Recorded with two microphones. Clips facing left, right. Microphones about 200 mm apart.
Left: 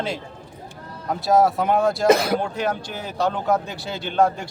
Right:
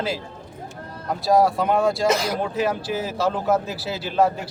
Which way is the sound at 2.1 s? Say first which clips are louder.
Left 5 dB; 60° left (ahead or behind).